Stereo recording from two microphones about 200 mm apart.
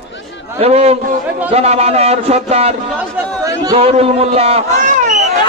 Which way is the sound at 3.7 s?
30° right (ahead or behind).